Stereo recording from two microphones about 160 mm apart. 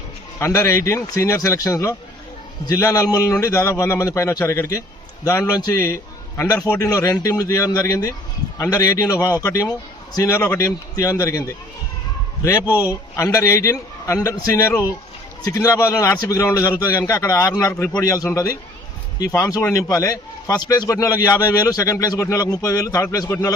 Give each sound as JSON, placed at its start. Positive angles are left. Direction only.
{"t": 0.3, "sound": "a man's voice", "side_deg": 20}
{"t": 12.6, "sound": "a man's voice", "side_deg": -10}
{"t": 12.9, "sound": "a man's voice", "side_deg": 20}